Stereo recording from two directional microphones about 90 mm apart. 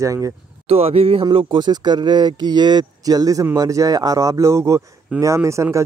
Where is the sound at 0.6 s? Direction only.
90° right.